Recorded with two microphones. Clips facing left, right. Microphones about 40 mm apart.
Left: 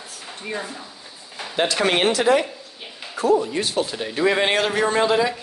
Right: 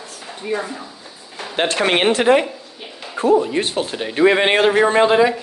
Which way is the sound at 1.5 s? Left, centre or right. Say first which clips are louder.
Right 2 dB; right.